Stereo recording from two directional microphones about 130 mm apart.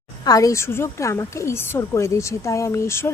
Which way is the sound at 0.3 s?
25° left (ahead or behind).